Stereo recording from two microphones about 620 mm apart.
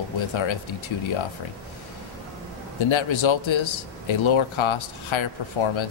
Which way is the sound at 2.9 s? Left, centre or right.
Left.